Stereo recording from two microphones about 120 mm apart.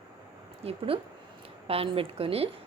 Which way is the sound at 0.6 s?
55° right (ahead or behind).